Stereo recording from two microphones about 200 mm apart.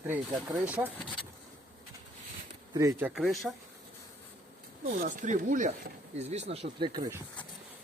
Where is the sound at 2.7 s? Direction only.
15° right (ahead or behind).